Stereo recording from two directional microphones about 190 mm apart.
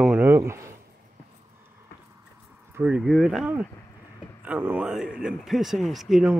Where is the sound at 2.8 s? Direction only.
5° right (ahead or behind).